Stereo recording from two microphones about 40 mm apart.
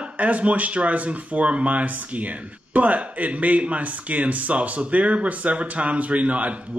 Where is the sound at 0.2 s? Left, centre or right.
Right.